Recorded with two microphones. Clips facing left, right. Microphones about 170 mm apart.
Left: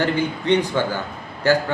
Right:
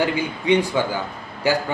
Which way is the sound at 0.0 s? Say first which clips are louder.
Left 1 dB; 10° right (ahead or behind).